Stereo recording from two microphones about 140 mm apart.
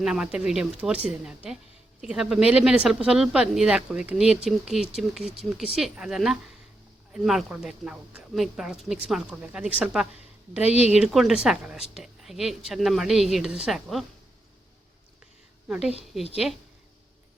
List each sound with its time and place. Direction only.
0.0 s speech: 5° right (ahead or behind)
10.6 s speech: 50° left (ahead or behind)
10.9 s speech: centre (ahead or behind)
15.6 s a woman's voice: 10° right (ahead or behind)